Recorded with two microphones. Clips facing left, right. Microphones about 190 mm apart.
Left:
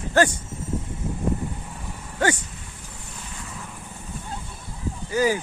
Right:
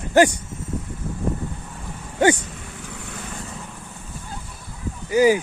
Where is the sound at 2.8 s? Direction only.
80° right.